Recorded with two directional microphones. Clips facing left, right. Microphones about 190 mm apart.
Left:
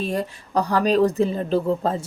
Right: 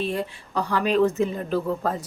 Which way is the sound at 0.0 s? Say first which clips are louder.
Left 2 dB; 40° left (ahead or behind).